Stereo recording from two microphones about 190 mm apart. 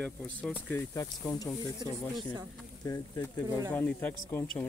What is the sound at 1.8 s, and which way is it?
Speech, 25° right (ahead or behind).